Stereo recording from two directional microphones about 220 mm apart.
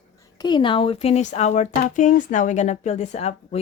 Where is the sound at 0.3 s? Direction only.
20° left (ahead or behind).